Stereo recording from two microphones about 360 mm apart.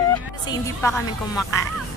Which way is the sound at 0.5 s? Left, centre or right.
Centre.